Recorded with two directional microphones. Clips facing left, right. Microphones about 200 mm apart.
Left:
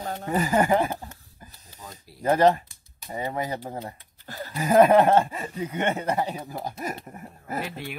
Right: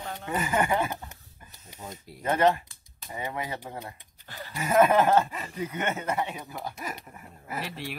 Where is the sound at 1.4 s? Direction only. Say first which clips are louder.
Left 6 dB; 35° left (ahead or behind).